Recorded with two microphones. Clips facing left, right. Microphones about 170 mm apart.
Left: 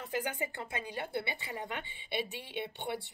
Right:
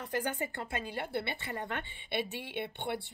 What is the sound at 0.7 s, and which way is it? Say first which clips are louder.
Speech: right 2 dB; 15° left (ahead or behind).